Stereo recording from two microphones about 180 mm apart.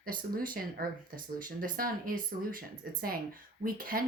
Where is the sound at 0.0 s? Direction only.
55° right (ahead or behind).